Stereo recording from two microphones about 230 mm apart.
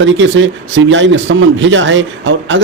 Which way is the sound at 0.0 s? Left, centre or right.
Right.